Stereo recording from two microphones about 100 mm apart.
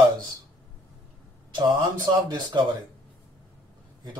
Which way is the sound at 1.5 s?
45° right (ahead or behind).